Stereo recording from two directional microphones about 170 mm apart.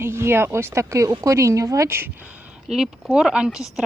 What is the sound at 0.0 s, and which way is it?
Speech, 15° right (ahead or behind).